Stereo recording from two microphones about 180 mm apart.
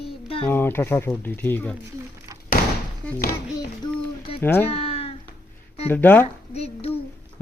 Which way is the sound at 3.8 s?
30° left (ahead or behind).